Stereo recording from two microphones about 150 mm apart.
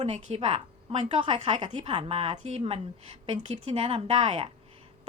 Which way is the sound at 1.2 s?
35° right (ahead or behind).